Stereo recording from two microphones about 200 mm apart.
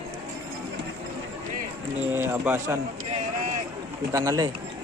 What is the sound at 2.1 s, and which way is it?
Speech, 10° right (ahead or behind).